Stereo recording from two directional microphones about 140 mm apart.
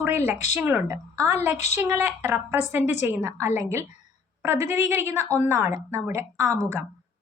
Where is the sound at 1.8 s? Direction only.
15° right (ahead or behind).